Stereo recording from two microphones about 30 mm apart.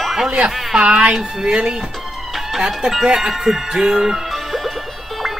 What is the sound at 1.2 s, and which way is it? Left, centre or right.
Music, right.